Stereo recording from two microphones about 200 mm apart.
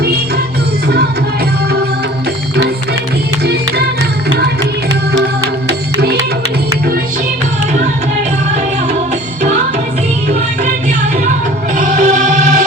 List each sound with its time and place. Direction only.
5.6 s music: 55° right (ahead or behind)
11.8 s music: 40° right (ahead or behind)